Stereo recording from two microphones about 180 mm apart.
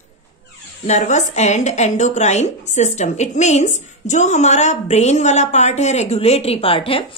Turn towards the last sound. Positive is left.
turn(degrees=30)  # may be behind; listen again after turning